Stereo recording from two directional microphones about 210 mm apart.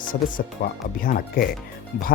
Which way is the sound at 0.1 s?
40° left (ahead or behind).